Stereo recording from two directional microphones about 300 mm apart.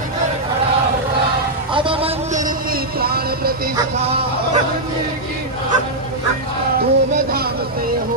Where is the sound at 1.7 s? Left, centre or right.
Centre.